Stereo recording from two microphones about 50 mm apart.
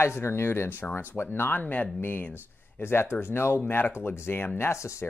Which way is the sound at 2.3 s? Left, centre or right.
Left.